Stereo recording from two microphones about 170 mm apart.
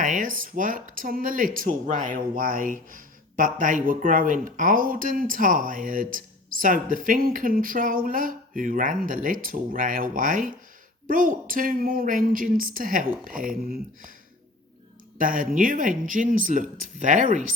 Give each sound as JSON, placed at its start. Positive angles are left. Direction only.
{"t": 0.0, "sound": "speech", "side_deg": -50}
{"t": 15.2, "sound": "speech", "side_deg": -55}